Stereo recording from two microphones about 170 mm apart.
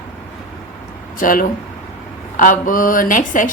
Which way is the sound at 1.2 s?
55° left (ahead or behind).